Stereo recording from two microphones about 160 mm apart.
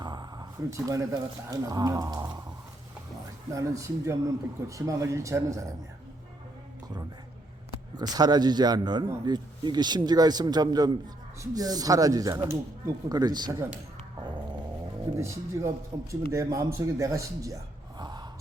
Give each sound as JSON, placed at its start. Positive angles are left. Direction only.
{"t": 0.0, "sound": "speech", "side_deg": -25}
{"t": 3.5, "sound": "a man's voice", "side_deg": -20}
{"t": 7.9, "sound": "a man's voice", "side_deg": -25}
{"t": 15.1, "sound": "a man's voice", "side_deg": -20}